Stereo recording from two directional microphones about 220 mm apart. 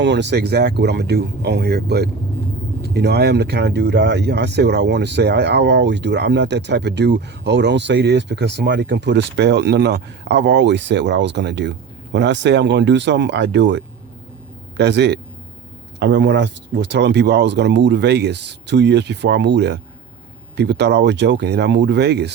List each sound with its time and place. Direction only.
0.0 s speech: 50° right (ahead or behind)